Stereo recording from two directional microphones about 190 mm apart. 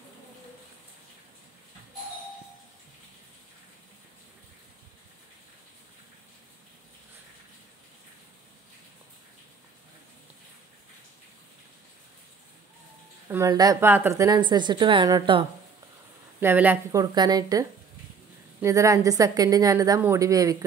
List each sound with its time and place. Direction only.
13.3 s a woman's voice: 20° right (ahead or behind)
16.3 s a woman's voice: 10° right (ahead or behind)
17.0 s a woman's voice: 20° right (ahead or behind)